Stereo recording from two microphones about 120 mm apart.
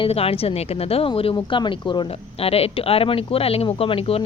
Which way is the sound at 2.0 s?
55° left (ahead or behind).